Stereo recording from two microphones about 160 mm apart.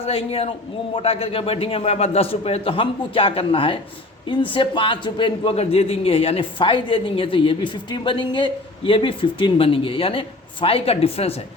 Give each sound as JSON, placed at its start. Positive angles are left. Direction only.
{"t": 0.0, "sound": "a man's voice", "side_deg": 35}